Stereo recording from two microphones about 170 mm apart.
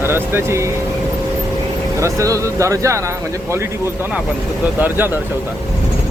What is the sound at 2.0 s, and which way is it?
Speech, 15° right (ahead or behind).